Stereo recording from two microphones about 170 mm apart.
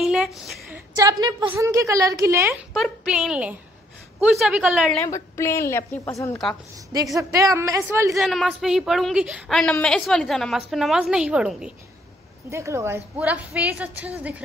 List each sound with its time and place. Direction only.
0.0 s a sound: centre (ahead or behind)
0.9 s a woman's voice: 20° right (ahead or behind)
2.7 s a woman's voice: 5° right (ahead or behind)
5.0 s a woman's voice: 15° left (ahead or behind)
7.2 s a woman's voice: 20° right (ahead or behind)
8.1 s a woman's voice: centre (ahead or behind)
12.4 s a woman's voice: 15° right (ahead or behind)